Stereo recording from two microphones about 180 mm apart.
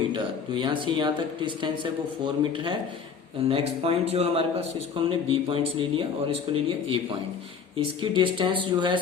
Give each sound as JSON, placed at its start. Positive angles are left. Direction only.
{"t": 0.1, "sound": "a man's voice", "side_deg": -25}